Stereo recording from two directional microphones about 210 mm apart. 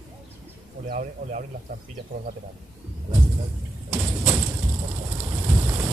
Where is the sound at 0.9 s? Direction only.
35° right (ahead or behind).